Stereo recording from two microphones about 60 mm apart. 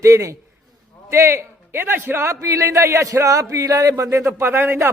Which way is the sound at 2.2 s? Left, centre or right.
Right.